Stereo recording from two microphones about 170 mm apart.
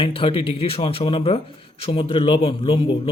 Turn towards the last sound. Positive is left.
turn(degrees=35)  # may be behind; listen again after turning